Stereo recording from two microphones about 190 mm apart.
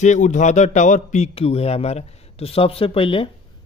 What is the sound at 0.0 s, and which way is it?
A man's voice, 40° left (ahead or behind).